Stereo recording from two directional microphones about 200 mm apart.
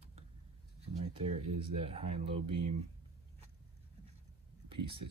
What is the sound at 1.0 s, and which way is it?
Speech, 25° right (ahead or behind).